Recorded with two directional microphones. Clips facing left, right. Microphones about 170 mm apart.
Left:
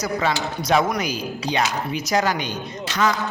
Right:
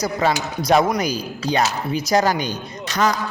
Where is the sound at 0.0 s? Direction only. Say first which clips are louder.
Right 2 dB; 35° right (ahead or behind).